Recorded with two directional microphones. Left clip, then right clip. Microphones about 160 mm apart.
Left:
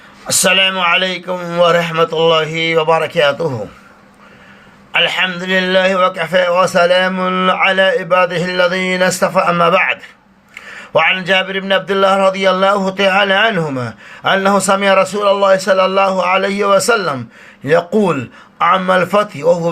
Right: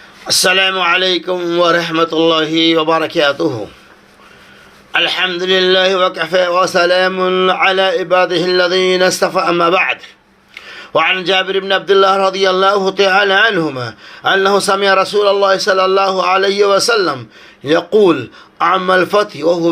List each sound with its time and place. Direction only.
0.3 s a man's voice: 45° right (ahead or behind)
4.9 s a man's voice: 40° right (ahead or behind)